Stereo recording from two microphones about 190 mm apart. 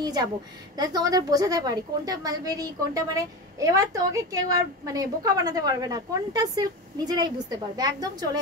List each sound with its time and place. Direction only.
0.0 s a woman's voice: 20° right (ahead or behind)